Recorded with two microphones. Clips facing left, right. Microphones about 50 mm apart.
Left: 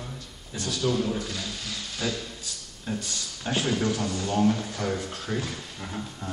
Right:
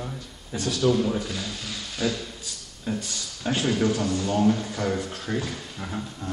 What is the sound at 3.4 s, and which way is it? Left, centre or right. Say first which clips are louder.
Speech: right 3 dB; centre.